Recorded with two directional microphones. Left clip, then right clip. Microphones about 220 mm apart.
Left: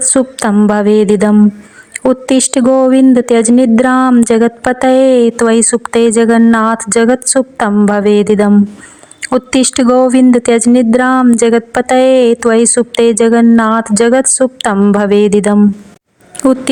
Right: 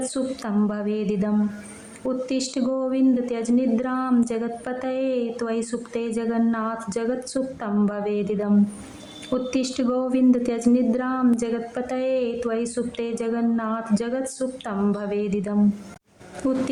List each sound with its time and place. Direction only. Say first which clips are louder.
0.1 s a woman's voice: left 15 dB; 40° left (ahead or behind)